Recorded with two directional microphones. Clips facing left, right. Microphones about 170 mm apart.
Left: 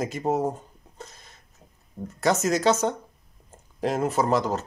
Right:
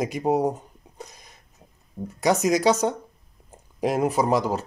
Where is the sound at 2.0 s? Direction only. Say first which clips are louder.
Right 2 dB; 15° right (ahead or behind).